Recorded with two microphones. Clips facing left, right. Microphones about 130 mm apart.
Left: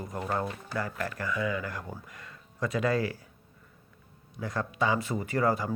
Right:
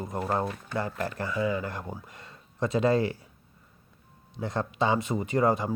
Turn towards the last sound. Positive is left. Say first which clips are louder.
# right 3 dB
turn(degrees=-20)  # may be behind; listen again after turning